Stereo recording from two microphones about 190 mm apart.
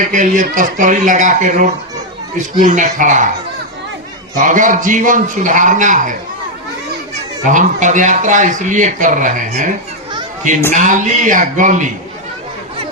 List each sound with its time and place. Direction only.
0.0 s a man's voice: 45° right (ahead or behind)
4.4 s a man's voice: 45° right (ahead or behind)
7.4 s speech: 40° right (ahead or behind)
10.8 s speech: 40° right (ahead or behind)